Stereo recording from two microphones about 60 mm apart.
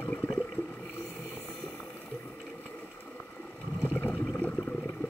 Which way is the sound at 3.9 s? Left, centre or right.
Left.